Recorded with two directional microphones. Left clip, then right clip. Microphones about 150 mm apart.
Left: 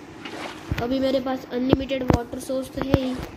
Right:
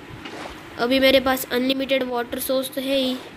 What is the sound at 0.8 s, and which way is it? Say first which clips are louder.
A woman's voice: right 7 dB; 25° right (ahead or behind).